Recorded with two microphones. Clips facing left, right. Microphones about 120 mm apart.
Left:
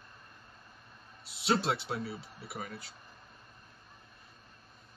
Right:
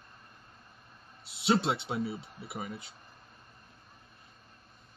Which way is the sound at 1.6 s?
25° right (ahead or behind).